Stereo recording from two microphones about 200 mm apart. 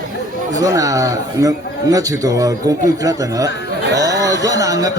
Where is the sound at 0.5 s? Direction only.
15° right (ahead or behind).